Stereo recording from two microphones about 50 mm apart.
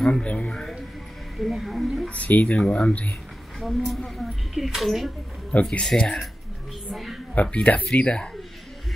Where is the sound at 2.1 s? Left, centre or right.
Left.